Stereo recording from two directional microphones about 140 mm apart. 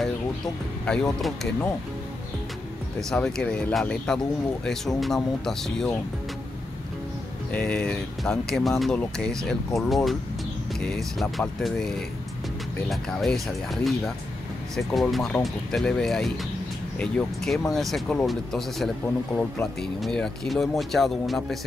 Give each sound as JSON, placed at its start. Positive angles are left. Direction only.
{"t": 0.8, "sound": "speech", "side_deg": 5}
{"t": 3.0, "sound": "speech", "side_deg": 5}
{"t": 7.5, "sound": "speech", "side_deg": 5}
{"t": 12.9, "sound": "speech", "side_deg": 0}